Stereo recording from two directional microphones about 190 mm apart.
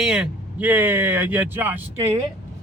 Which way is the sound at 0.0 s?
5° right (ahead or behind).